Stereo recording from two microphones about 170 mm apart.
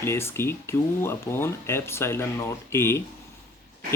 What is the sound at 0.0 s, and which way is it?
Speech, 15° left (ahead or behind).